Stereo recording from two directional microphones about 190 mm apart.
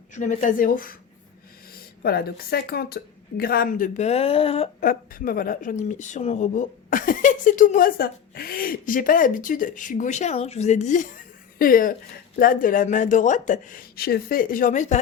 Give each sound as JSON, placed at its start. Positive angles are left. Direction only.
{"t": 0.1, "sound": "a woman's voice", "side_deg": 40}
{"t": 2.0, "sound": "a woman's voice", "side_deg": 55}
{"t": 4.8, "sound": "a woman's voice", "side_deg": 45}